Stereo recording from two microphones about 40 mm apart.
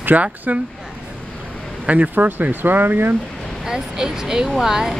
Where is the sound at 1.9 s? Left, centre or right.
Right.